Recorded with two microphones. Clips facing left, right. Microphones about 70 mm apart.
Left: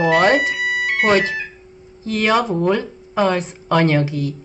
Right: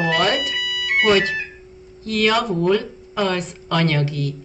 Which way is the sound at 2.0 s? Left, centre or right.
Left.